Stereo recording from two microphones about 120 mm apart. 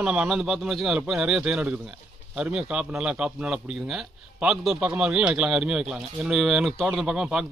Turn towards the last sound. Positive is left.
turn(degrees=-5)  # may be behind; listen again after turning